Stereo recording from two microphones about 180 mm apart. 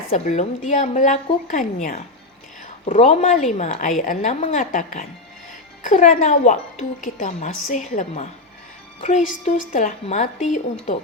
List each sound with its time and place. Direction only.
0.1 s a woman's voice: 40° left (ahead or behind)